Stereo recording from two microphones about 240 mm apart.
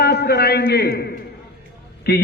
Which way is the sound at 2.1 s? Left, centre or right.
Left.